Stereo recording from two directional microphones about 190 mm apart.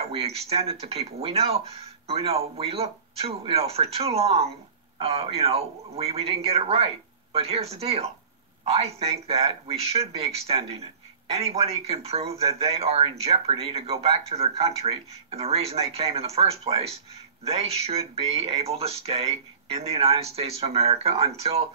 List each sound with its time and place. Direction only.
0.0 s speech: 30° right (ahead or behind)